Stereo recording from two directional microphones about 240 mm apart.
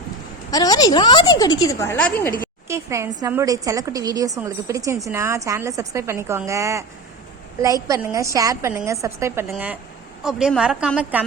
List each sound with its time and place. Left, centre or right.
0.5 s a woman's voice: centre
2.6 s a woman's voice: centre